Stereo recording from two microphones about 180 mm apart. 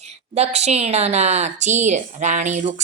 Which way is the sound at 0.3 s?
35° right (ahead or behind).